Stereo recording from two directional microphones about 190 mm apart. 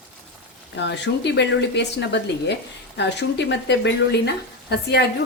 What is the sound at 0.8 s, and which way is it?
A woman's voice, 65° left (ahead or behind).